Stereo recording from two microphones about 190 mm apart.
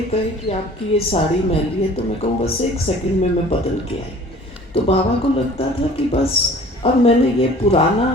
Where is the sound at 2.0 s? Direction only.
30° left (ahead or behind).